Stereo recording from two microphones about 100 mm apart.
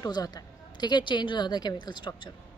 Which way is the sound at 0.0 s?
40° left (ahead or behind).